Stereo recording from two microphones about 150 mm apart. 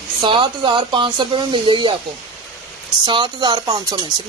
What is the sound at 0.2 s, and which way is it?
Speech, 35° right (ahead or behind).